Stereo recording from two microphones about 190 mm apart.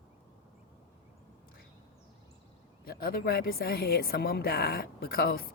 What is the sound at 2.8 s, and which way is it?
A woman's voice, 50° left (ahead or behind).